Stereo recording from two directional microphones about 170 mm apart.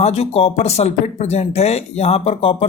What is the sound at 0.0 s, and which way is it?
A man's voice, 35° left (ahead or behind).